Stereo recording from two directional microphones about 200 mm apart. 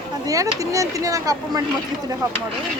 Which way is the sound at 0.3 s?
15° right (ahead or behind).